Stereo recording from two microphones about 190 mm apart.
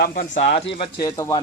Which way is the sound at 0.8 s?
20° left (ahead or behind).